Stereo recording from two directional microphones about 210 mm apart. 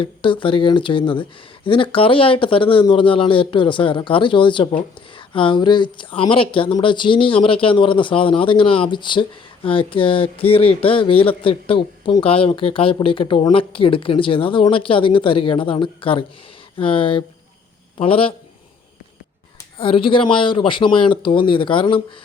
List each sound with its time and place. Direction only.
0.0 s a man's voice: 25° left (ahead or behind)
19.8 s speech: 25° left (ahead or behind)